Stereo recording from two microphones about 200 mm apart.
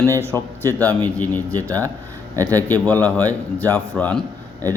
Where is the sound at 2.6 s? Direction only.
10° left (ahead or behind).